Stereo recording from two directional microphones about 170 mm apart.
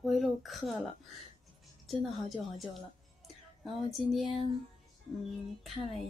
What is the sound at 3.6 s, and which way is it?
Speech, centre (ahead or behind).